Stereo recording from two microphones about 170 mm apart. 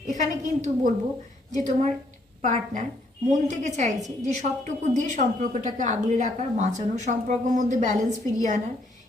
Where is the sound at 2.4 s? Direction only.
45° right (ahead or behind).